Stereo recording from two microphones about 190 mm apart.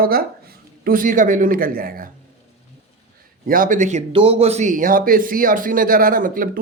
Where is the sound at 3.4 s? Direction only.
45° right (ahead or behind).